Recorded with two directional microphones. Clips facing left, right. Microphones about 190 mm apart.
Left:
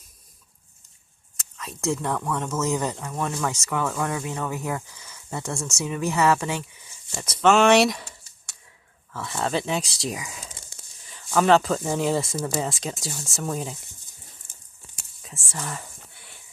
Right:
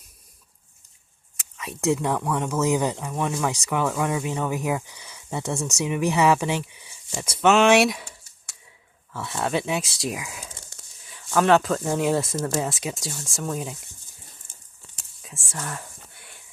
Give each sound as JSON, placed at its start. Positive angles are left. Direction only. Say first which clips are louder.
{"t": 1.5, "sound": "speech", "louder": "right 4 dB", "side_deg": -15}
{"t": 7.4, "sound": "a sound", "louder": "even", "side_deg": 0}
{"t": 9.1, "sound": "speech", "louder": "right 1 dB", "side_deg": 0}
{"t": 15.2, "sound": "whispering", "louder": "even", "side_deg": 0}